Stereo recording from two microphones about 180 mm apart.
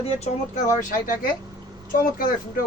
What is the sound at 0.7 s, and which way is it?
Speech, 45° left (ahead or behind).